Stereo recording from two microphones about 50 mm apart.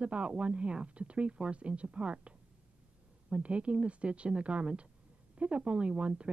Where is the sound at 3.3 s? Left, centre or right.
Right.